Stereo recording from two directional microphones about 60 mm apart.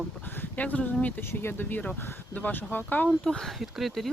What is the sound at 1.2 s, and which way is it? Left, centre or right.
Speech, left.